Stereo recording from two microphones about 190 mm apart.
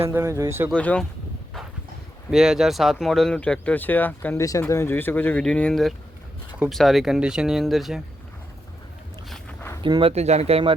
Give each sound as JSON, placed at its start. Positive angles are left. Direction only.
{"t": 0.0, "sound": "speech", "side_deg": -15}
{"t": 0.7, "sound": "speech", "side_deg": 5}
{"t": 2.3, "sound": "speech", "side_deg": -5}
{"t": 9.3, "sound": "a sound", "side_deg": 10}
{"t": 9.8, "sound": "speech", "side_deg": -25}